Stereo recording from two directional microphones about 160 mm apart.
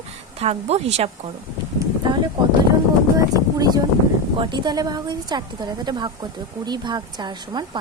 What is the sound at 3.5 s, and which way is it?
A woman's voice, 25° right (ahead or behind).